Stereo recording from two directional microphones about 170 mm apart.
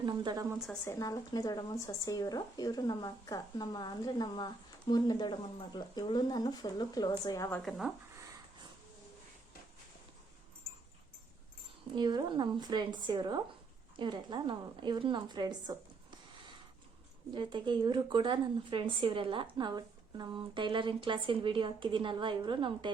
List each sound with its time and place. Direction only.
0.0 s speech: 25° right (ahead or behind)
0.5 s speech: centre (ahead or behind)
0.9 s speech: 20° left (ahead or behind)
7.6 s speech: centre (ahead or behind)
11.9 s speech: 25° right (ahead or behind)
17.3 s speech: 25° right (ahead or behind)